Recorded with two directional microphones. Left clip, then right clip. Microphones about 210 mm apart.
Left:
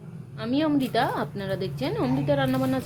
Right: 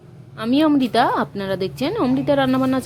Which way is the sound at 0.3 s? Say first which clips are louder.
Right 7 dB; 30° right (ahead or behind).